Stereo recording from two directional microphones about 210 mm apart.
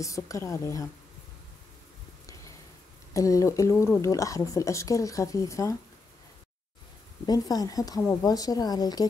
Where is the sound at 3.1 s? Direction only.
15° left (ahead or behind).